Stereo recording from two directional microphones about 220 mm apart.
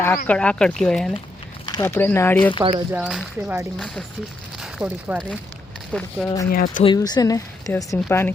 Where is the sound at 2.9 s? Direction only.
5° right (ahead or behind).